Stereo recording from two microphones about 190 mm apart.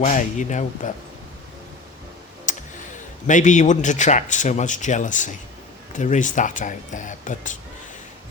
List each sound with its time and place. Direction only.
0.0 s a man's voice: 40° left (ahead or behind)
2.5 s tick: 40° left (ahead or behind)
3.2 s a man's voice: 40° left (ahead or behind)